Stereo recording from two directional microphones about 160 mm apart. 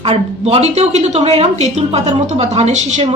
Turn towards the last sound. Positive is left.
turn(degrees=-45)  # may be behind; listen again after turning